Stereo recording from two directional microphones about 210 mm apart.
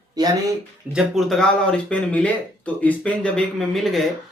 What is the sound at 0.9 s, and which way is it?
Speech, centre (ahead or behind).